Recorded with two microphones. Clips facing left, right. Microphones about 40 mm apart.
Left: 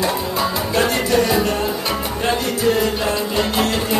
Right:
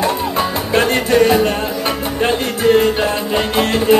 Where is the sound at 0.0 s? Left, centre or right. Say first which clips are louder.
Right 3 dB; right.